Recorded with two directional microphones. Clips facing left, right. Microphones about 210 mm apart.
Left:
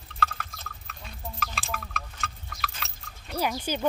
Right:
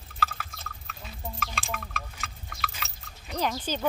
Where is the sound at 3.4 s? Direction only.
10° left (ahead or behind).